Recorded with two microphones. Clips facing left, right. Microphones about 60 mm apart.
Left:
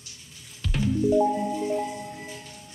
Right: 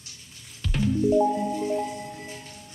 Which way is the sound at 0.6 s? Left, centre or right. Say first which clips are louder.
Right 1 dB; centre.